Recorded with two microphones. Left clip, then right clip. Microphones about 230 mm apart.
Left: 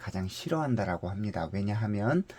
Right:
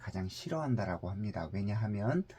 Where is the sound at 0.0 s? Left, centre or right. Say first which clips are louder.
Left 5 dB; left.